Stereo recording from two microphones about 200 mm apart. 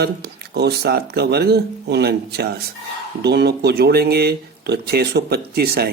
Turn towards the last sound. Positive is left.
turn(degrees=-50)  # may be behind; listen again after turning